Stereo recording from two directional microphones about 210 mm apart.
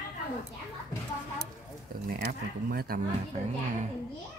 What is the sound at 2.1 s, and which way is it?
Speech, 45° right (ahead or behind).